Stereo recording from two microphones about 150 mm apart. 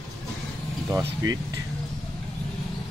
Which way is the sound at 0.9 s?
20° right (ahead or behind).